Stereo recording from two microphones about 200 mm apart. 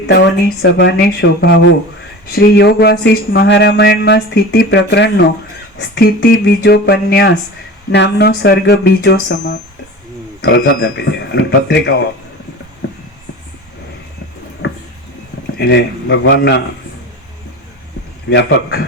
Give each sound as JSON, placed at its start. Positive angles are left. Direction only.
{"t": 0.1, "sound": "speech", "side_deg": 60}
{"t": 1.5, "sound": "speech", "side_deg": 70}
{"t": 2.3, "sound": "speech", "side_deg": 50}
{"t": 10.8, "sound": "speech", "side_deg": 55}
{"t": 15.5, "sound": "speech", "side_deg": 55}
{"t": 18.3, "sound": "speech", "side_deg": 60}